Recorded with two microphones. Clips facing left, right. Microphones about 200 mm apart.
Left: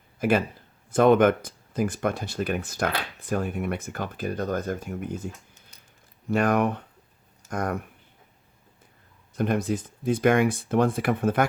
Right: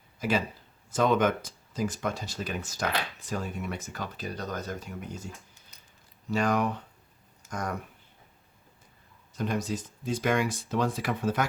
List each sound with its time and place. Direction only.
0.2 s a man's voice: 55° left (ahead or behind)
9.3 s speech: 55° left (ahead or behind)